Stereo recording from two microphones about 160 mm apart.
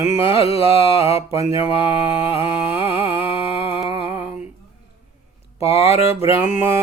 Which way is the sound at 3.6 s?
15° right (ahead or behind).